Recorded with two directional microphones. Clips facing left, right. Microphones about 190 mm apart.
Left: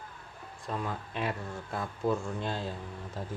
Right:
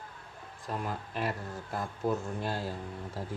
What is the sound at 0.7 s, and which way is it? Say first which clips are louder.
Speech: left 1 dB; 5° right (ahead or behind).